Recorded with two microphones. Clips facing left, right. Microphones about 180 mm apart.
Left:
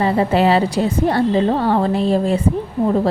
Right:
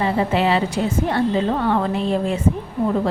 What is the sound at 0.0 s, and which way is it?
A woman's voice, 40° left (ahead or behind).